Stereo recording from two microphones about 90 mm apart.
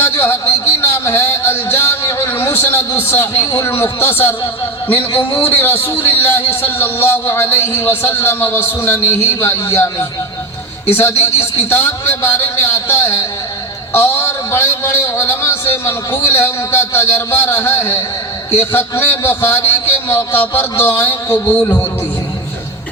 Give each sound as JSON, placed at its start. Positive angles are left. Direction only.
{"t": 0.0, "sound": "a man's voice", "side_deg": 25}
{"t": 10.9, "sound": "a man's voice", "side_deg": 25}